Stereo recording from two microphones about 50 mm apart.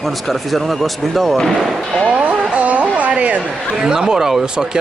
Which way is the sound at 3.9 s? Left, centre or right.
Centre.